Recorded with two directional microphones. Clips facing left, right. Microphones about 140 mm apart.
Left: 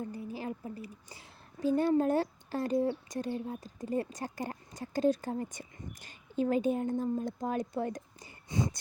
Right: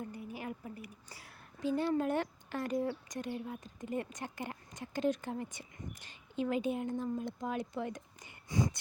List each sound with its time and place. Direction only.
0.0 s a woman's voice: 30° left (ahead or behind)
1.6 s speech: 45° left (ahead or behind)
8.4 s speech: 25° left (ahead or behind)